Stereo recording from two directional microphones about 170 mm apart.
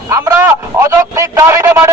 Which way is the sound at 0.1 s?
15° right (ahead or behind).